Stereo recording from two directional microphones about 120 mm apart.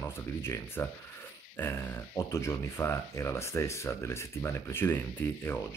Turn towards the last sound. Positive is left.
turn(degrees=15)  # may be behind; listen again after turning